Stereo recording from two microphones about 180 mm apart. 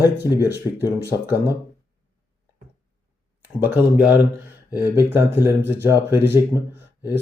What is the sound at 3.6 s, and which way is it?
Speech, 10° right (ahead or behind).